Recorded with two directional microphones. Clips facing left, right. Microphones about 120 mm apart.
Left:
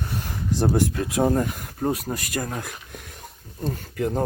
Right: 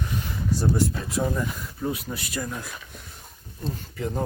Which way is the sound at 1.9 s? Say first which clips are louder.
Left 4 dB; 45° left (ahead or behind).